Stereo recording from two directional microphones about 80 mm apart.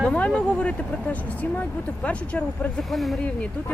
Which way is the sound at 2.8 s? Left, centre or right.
Centre.